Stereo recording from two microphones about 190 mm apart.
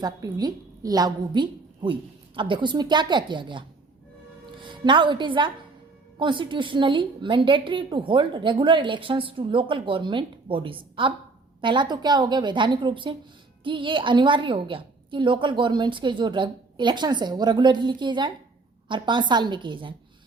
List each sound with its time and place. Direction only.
0.0 s a woman's voice: 20° right (ahead or behind)
4.6 s a woman's voice: 25° right (ahead or behind)